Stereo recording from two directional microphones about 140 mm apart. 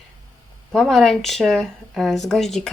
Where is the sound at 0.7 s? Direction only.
Centre (ahead or behind).